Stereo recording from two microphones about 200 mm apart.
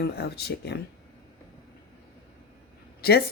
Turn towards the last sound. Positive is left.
turn(degrees=50)  # may be behind; listen again after turning